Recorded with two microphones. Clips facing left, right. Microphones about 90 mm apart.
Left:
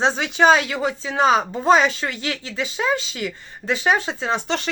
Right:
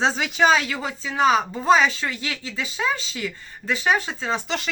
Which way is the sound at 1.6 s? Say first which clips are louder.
Left 1 dB; 35° left (ahead or behind).